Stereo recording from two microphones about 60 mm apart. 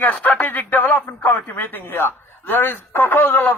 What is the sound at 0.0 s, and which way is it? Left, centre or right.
Speech, left.